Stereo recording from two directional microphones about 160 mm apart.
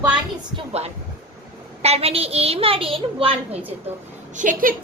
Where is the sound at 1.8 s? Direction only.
40° right (ahead or behind).